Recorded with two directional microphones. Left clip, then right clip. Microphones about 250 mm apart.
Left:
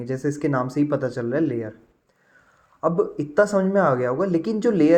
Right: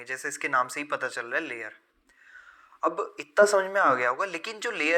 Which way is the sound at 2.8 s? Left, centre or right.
Right.